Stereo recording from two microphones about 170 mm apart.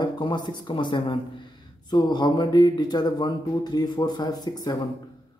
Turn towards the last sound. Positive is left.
turn(degrees=25)  # may be behind; listen again after turning